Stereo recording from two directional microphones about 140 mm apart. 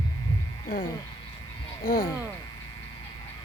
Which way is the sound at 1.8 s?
30° left (ahead or behind).